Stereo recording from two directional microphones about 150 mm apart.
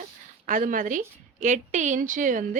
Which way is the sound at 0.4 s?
65° right (ahead or behind).